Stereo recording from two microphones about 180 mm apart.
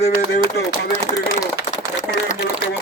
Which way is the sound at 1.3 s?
40° left (ahead or behind).